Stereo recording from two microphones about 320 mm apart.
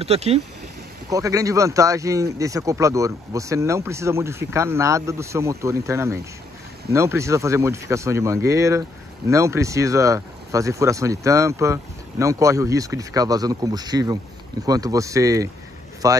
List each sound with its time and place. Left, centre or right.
0.0 s speech: centre